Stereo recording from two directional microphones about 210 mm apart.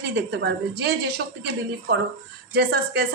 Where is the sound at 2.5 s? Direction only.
50° right (ahead or behind).